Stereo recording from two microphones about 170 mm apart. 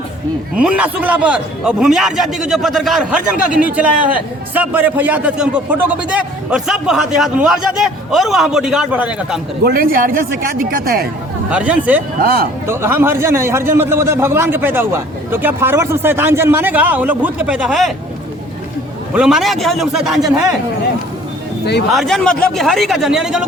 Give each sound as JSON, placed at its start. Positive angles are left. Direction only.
{"t": 0.5, "sound": "a man's voice", "side_deg": -5}
{"t": 9.6, "sound": "speech", "side_deg": -60}
{"t": 11.5, "sound": "speech", "side_deg": -5}
{"t": 12.2, "sound": "speech", "side_deg": -60}
{"t": 12.6, "sound": "speech", "side_deg": -15}
{"t": 19.1, "sound": "a man's voice", "side_deg": -5}
{"t": 21.9, "sound": "a man's voice", "side_deg": 0}